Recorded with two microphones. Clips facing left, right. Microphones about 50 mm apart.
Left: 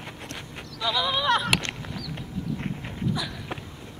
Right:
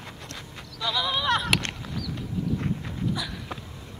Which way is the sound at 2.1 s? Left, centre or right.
Left.